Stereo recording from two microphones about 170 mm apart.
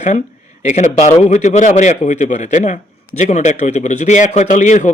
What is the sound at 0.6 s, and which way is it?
Speech, 45° left (ahead or behind).